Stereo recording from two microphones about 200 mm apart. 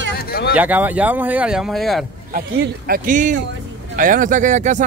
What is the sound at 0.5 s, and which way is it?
Speech, 10° right (ahead or behind).